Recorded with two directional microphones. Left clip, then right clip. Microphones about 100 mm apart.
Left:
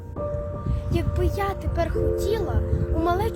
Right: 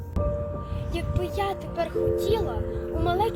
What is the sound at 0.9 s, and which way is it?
Speech, 50° left (ahead or behind).